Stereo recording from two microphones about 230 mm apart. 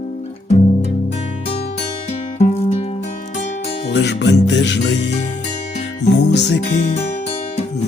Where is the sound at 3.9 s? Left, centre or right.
Left.